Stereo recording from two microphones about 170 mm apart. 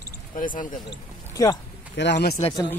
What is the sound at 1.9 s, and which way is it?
Speech, 90° left.